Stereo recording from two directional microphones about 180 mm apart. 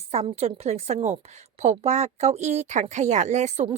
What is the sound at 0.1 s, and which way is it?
Speech, 35° right (ahead or behind).